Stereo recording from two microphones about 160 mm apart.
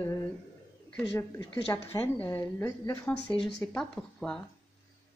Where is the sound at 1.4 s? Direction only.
25° left (ahead or behind); by 4.4 s 5° left (ahead or behind).